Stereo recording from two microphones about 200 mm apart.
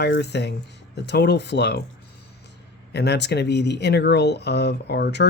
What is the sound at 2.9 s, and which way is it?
Speech, 55° left (ahead or behind).